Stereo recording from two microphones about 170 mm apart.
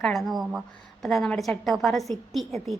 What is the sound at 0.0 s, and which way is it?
A woman's voice, centre (ahead or behind).